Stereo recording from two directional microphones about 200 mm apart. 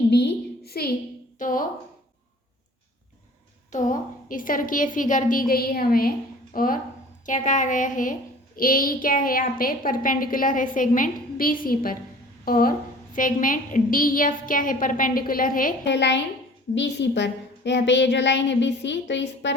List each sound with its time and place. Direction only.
0.1 s a sound: 55° left (ahead or behind)
1.4 s a woman's voice: 40° left (ahead or behind)
3.7 s a woman's voice: 40° left (ahead or behind)
15.9 s a woman's voice: 60° left (ahead or behind)